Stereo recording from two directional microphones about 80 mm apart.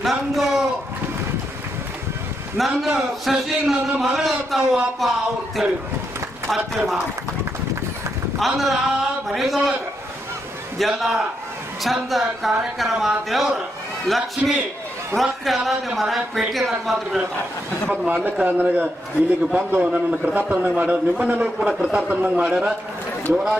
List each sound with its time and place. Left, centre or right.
0.0 s a man's voice: centre
2.6 s speech: centre
8.4 s speech: centre
10.8 s speech: centre
17.9 s a man's voice: centre